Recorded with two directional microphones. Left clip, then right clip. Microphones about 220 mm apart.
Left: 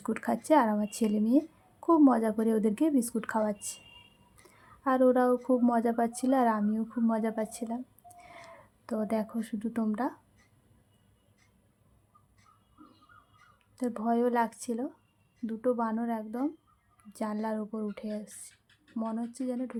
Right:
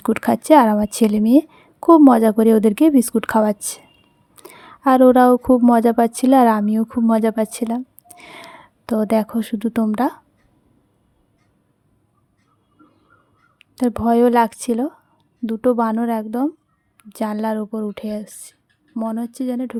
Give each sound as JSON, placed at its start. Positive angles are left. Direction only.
{"t": 0.0, "sound": "a woman's voice", "side_deg": -40}
{"t": 13.6, "sound": "speech", "side_deg": -40}